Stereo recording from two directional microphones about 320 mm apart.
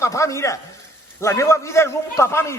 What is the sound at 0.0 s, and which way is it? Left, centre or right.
A man's voice, centre.